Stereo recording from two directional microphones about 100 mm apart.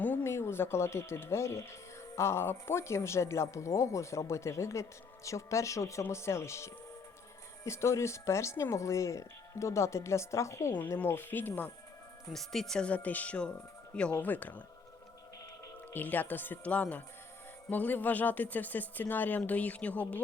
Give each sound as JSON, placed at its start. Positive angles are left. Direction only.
{"t": 0.0, "sound": "speech", "side_deg": 15}
{"t": 12.3, "sound": "speech", "side_deg": 5}
{"t": 15.9, "sound": "speech", "side_deg": 20}